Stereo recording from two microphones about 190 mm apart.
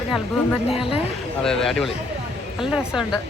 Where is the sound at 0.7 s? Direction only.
30° left (ahead or behind).